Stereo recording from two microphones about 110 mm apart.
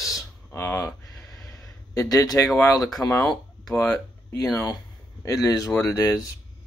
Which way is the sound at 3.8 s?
25° left (ahead or behind).